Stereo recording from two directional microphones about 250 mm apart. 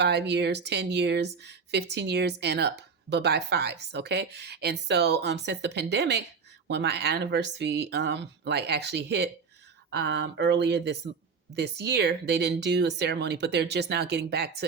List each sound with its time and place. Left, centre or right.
0.0 s speech: right